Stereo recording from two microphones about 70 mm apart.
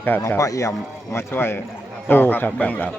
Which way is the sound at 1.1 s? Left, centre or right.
Left.